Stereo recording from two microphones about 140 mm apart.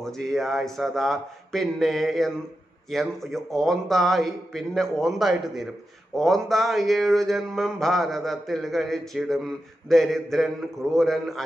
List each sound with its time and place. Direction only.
0.0 s speech: 5° left (ahead or behind)